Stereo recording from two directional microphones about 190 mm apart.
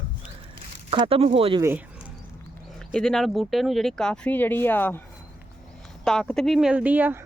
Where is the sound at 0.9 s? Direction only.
30° right (ahead or behind).